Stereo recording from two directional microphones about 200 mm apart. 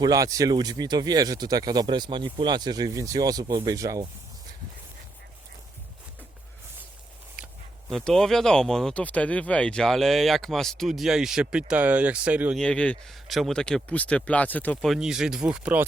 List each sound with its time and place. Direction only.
0.0 s speech: 15° right (ahead or behind)
7.4 s a sound: 5° right (ahead or behind)
7.9 s speech: centre (ahead or behind)
12.6 s speech: 5° left (ahead or behind)